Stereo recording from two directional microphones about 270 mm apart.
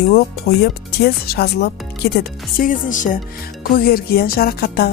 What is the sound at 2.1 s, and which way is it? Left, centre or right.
Music, left.